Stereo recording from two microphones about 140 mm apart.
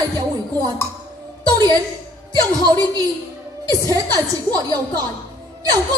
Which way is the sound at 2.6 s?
30° right (ahead or behind).